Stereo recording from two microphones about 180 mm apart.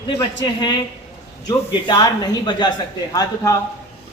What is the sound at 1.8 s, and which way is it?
Speech, 25° left (ahead or behind).